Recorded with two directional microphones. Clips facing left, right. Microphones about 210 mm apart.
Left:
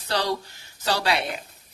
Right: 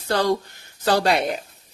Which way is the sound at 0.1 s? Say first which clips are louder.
Right 5 dB; 50° right (ahead or behind).